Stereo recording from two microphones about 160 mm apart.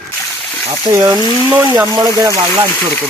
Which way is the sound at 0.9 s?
20° right (ahead or behind).